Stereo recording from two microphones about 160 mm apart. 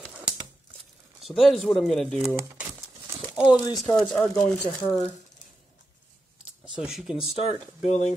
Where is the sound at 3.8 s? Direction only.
Centre (ahead or behind).